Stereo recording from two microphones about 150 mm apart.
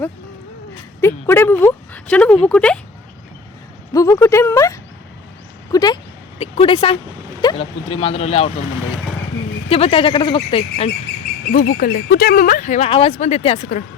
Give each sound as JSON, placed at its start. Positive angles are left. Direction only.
{"t": 1.0, "sound": "speech", "side_deg": 15}
{"t": 3.9, "sound": "speech", "side_deg": 20}
{"t": 5.7, "sound": "a sound", "side_deg": 25}
{"t": 6.4, "sound": "speech", "side_deg": 35}
{"t": 9.6, "sound": "speech", "side_deg": 40}
{"t": 11.5, "sound": "speech", "side_deg": 70}
{"t": 12.9, "sound": "speech", "side_deg": 40}